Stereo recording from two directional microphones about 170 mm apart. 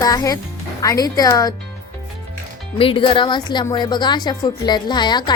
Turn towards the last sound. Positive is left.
turn(degrees=25)  # may be behind; listen again after turning